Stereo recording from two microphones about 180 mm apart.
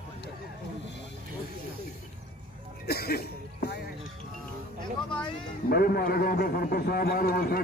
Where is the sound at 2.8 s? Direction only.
60° left (ahead or behind).